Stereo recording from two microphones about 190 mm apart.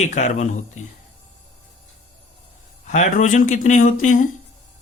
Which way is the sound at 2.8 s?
40° left (ahead or behind).